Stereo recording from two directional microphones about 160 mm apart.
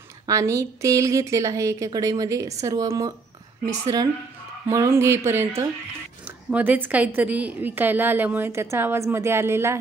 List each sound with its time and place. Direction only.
0.3 s a woman's voice: 20° right (ahead or behind)